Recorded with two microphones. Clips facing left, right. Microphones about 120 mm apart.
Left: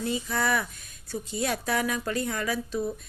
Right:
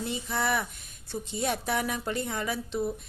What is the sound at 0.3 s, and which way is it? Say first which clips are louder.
A woman's voice: right 1 dB; 25° right (ahead or behind).